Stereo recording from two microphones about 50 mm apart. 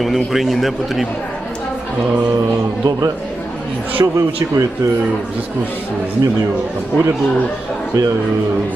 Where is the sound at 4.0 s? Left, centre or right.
Right.